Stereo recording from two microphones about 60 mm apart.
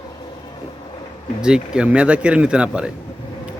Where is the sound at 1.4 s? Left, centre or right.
Centre.